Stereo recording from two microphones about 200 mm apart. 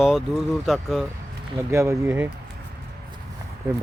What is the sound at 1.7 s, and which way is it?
Speech, 15° right (ahead or behind).